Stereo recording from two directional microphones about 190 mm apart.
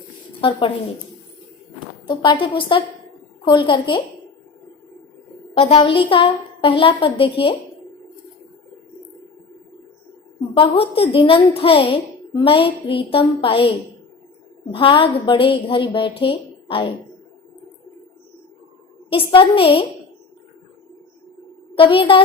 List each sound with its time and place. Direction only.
2.0 s a woman's voice: 25° left (ahead or behind)
5.5 s a woman's voice: 30° left (ahead or behind)
10.5 s a woman's voice: 30° left (ahead or behind)
19.1 s a woman's voice: 30° left (ahead or behind)
21.8 s a woman's voice: 25° left (ahead or behind)